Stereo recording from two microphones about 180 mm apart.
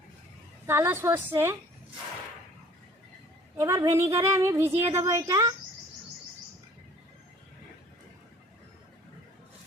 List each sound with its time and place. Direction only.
0.7 s a woman's voice: 15° right (ahead or behind)
3.6 s a woman's voice: 15° right (ahead or behind)